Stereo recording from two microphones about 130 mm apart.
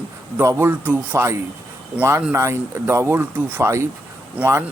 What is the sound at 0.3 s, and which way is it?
A man's voice, 20° right (ahead or behind).